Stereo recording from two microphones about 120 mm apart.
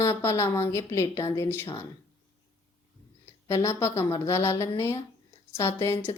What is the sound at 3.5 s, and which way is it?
A woman's voice, 25° left (ahead or behind).